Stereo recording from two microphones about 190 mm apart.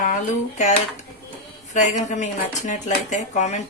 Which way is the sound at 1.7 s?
40° left (ahead or behind).